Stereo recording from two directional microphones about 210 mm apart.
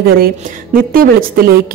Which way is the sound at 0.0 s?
45° right (ahead or behind).